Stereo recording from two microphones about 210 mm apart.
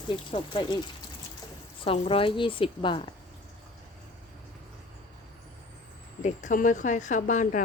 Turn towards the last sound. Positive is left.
turn(degrees=35)  # may be behind; listen again after turning